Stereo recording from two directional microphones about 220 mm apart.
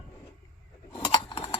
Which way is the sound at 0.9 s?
20° left (ahead or behind).